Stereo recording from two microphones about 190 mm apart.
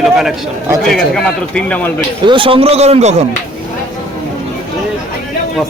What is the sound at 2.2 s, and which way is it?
A man's voice, 25° right (ahead or behind).